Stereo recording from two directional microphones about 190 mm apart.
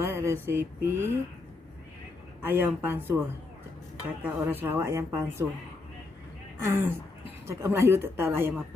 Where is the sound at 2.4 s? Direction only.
10° right (ahead or behind).